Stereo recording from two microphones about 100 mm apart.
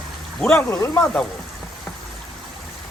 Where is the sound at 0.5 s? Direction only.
25° left (ahead or behind).